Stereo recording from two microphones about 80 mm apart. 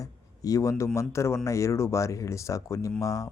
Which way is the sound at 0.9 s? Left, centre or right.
Left.